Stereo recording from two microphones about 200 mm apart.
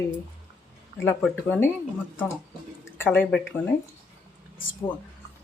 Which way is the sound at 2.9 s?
10° left (ahead or behind).